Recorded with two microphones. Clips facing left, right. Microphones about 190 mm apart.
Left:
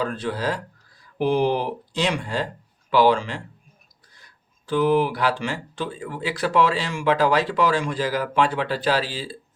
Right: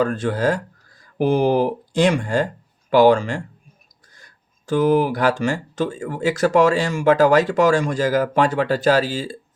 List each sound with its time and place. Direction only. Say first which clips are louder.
0.0 s speech: right 6 dB; 50° right (ahead or behind)